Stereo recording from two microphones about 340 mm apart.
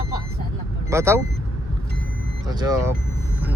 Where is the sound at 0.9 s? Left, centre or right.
Centre.